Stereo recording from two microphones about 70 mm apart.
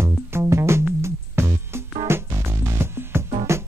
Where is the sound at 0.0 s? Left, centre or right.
Right.